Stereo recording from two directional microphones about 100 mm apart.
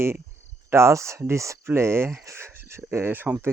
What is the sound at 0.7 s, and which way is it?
Speech, 25° right (ahead or behind).